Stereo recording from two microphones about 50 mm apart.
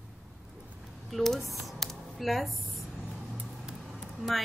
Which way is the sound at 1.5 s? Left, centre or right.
Centre.